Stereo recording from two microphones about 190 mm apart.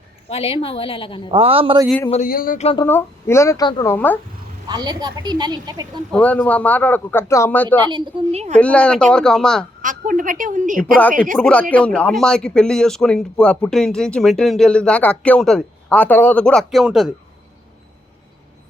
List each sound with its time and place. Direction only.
0.3 s a woman's voice: 30° left (ahead or behind)
1.3 s a woman's voice: 30° right (ahead or behind)
2.2 s speech: 50° left (ahead or behind)
2.8 s a man's voice: 10° left (ahead or behind)
3.9 s a man's voice: 10° left (ahead or behind)
4.7 s a woman's voice: 20° right (ahead or behind)
6.1 s a man's voice: 10° left (ahead or behind)
7.9 s a woman's voice: 30° right (ahead or behind)
8.5 s speech: 5° left (ahead or behind)
9.8 s a woman's voice: 45° right (ahead or behind)
11.3 s speech: 5° left (ahead or behind)